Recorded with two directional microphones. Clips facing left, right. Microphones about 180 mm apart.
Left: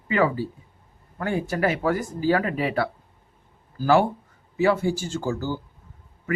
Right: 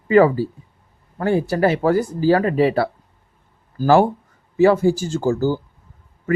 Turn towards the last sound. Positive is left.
turn(degrees=-40)  # may be behind; listen again after turning